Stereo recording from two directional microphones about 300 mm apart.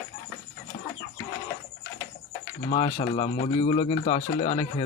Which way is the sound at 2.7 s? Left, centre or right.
Centre.